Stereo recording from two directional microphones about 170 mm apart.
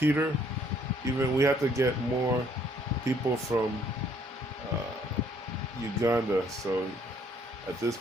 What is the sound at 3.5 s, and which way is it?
Speech, 15° right (ahead or behind).